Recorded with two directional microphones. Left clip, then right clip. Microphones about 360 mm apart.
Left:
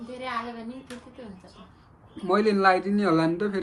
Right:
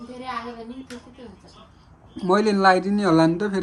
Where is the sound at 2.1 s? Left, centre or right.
Centre.